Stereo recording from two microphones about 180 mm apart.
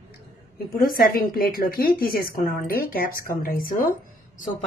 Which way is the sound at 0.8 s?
50° left (ahead or behind).